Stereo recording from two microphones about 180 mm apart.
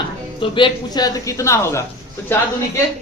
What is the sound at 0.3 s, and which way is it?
Speech, 25° left (ahead or behind).